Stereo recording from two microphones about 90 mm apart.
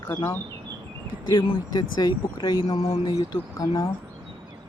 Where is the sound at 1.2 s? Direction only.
60° left (ahead or behind).